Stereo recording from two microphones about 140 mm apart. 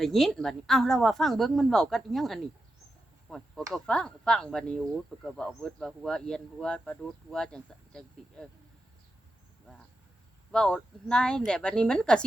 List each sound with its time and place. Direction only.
0.0 s speech: centre (ahead or behind)
3.2 s a sound: centre (ahead or behind)
3.7 s speech: 5° left (ahead or behind)
10.5 s speech: 5° left (ahead or behind)